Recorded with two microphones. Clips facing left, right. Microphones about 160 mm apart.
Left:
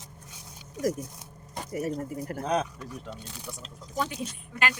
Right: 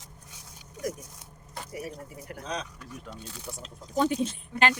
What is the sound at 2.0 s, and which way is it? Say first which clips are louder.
Speech: left 8 dB; 45° left (ahead or behind).